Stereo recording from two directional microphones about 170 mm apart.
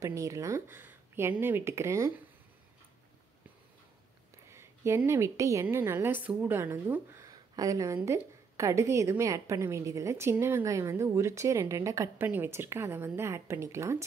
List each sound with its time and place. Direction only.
0.0 s a woman's voice: 15° right (ahead or behind)
4.5 s a woman's voice: 15° right (ahead or behind)